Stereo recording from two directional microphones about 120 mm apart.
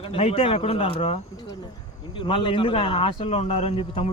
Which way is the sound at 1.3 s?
35° left (ahead or behind).